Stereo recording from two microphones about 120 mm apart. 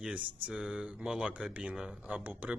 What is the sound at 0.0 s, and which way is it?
Speech, 10° right (ahead or behind).